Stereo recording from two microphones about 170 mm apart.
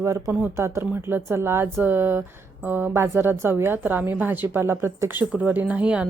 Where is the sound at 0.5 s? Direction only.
15° right (ahead or behind).